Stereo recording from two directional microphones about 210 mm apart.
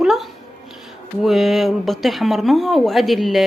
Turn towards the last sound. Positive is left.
turn(degrees=0)  # may be behind; listen again after turning